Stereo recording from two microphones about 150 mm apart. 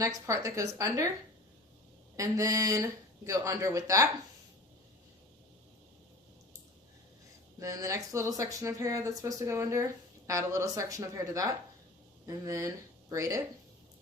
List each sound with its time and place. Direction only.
0.0 s speech: 20° right (ahead or behind)
2.1 s speech: 20° right (ahead or behind)
7.6 s speech: 20° right (ahead or behind)